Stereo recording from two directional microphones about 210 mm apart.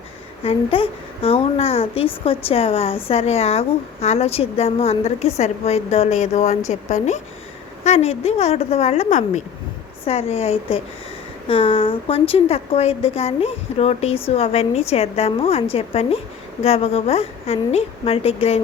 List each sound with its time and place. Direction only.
0.4 s a woman's voice: 25° left (ahead or behind)